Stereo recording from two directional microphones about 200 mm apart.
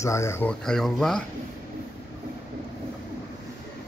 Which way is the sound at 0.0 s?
15° left (ahead or behind).